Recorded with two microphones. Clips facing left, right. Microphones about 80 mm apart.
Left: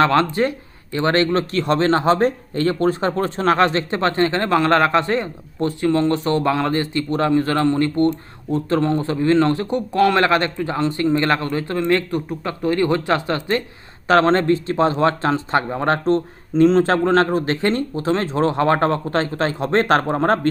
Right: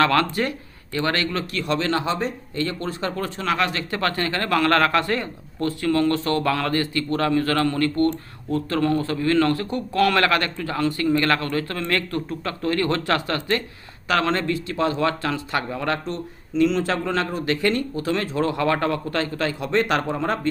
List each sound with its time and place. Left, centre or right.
0.0 s speech: left
2.8 s speech: left
14.1 s speech: left